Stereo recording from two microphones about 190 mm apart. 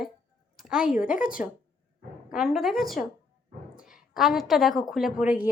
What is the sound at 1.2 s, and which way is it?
Speech, 45° left (ahead or behind).